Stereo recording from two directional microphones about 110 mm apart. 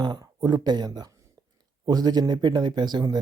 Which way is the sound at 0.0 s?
40° right (ahead or behind).